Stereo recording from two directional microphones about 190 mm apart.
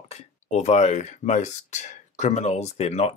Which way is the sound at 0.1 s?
35° left (ahead or behind).